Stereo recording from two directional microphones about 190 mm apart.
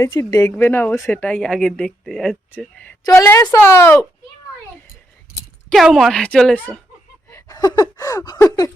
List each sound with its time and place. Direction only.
0.0 s speech: 20° left (ahead or behind)
5.6 s speech: centre (ahead or behind)
7.3 s a sound: 15° left (ahead or behind)